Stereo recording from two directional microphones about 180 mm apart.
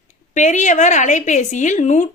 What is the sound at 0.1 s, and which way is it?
A woman's voice, 40° left (ahead or behind).